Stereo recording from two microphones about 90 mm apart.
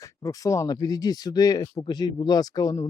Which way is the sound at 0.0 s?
40° left (ahead or behind).